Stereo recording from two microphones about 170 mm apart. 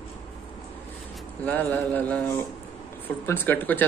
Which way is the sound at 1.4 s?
10° left (ahead or behind).